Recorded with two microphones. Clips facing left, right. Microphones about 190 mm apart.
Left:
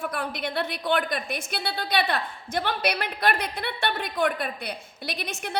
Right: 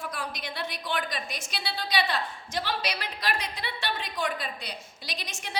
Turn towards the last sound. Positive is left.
turn(degrees=55)  # may be behind; listen again after turning